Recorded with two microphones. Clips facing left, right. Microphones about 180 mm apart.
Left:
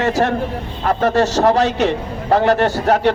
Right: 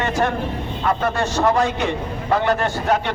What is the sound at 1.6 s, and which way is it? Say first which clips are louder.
Speech: left 4 dB; 75° left (ahead or behind).